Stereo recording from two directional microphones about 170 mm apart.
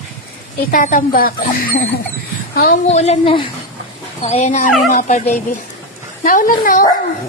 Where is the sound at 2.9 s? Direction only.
40° left (ahead or behind).